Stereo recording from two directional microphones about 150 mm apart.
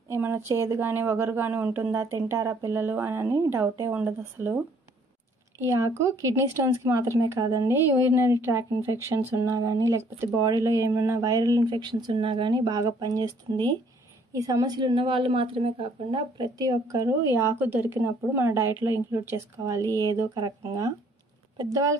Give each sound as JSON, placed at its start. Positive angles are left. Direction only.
{"t": 0.1, "sound": "speech", "side_deg": -15}
{"t": 5.6, "sound": "speech", "side_deg": -20}